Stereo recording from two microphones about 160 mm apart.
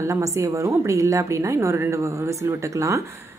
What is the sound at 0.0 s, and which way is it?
A woman's voice, 20° right (ahead or behind).